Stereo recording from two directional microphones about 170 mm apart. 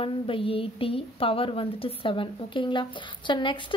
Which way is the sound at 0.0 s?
30° left (ahead or behind).